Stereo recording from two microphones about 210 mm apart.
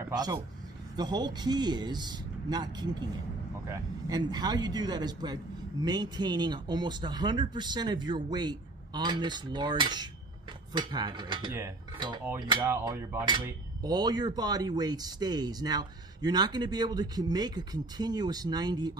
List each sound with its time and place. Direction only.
0.0 s a man's voice: 20° right (ahead or behind)